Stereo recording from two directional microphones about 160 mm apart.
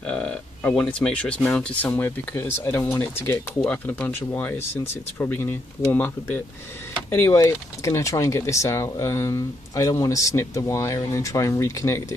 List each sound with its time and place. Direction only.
0.0 s speech: 5° left (ahead or behind)